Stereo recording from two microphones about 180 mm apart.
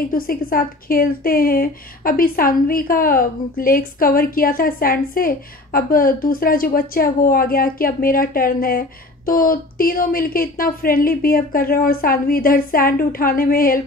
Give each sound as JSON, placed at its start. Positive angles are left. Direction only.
{"t": 0.1, "sound": "a woman's voice", "side_deg": 55}